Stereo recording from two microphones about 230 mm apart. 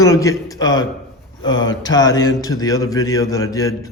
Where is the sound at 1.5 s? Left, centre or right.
Left.